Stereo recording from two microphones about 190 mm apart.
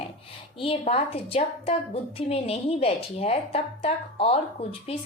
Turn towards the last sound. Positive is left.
turn(degrees=30)  # may be behind; listen again after turning